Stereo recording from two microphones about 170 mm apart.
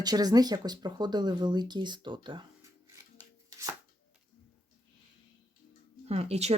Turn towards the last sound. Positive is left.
turn(degrees=-40)  # may be behind; listen again after turning